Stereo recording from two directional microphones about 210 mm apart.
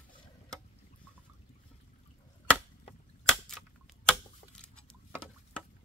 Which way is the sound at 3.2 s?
Centre (ahead or behind).